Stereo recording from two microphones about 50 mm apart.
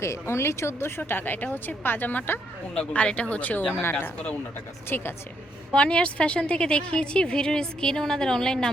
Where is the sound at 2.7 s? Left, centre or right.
Left.